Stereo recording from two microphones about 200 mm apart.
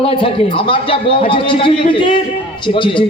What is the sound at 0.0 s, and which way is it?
A man's voice, 25° left (ahead or behind).